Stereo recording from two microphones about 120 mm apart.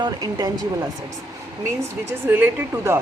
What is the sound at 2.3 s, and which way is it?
Speech, 20° right (ahead or behind).